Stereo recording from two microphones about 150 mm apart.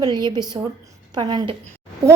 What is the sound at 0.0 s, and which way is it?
A woman's voice, 30° right (ahead or behind).